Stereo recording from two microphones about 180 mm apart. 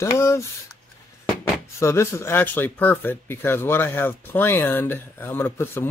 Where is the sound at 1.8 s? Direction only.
15° left (ahead or behind).